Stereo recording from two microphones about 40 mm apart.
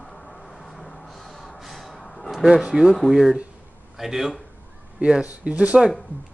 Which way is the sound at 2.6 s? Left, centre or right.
Centre.